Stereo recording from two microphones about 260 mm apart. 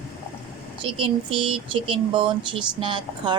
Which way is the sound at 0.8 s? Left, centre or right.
Centre.